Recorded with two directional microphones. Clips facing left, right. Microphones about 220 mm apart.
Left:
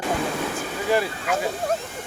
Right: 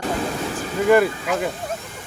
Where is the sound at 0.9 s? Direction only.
55° right (ahead or behind).